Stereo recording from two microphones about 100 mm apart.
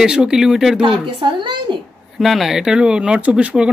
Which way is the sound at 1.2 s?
55° right (ahead or behind).